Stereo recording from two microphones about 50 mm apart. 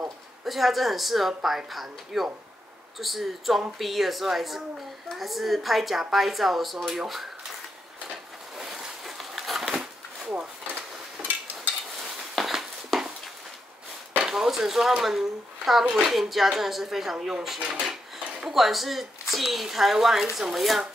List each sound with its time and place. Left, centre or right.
0.5 s a woman's voice: centre
8.5 s a sound: centre
11.5 s dishes: centre
14.2 s a woman's voice: centre
17.6 s speech: centre
18.5 s a woman's voice: centre